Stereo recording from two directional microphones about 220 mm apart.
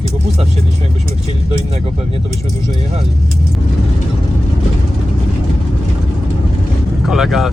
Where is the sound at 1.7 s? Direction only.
25° right (ahead or behind).